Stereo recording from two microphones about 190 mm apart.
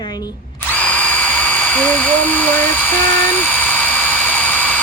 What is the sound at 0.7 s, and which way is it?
Drill, 10° left (ahead or behind).